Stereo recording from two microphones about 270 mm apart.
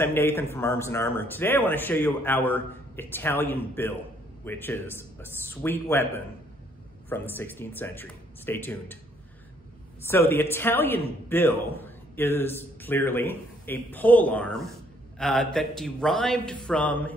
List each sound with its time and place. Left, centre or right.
0.0 s speech: centre
10.0 s a man's voice: centre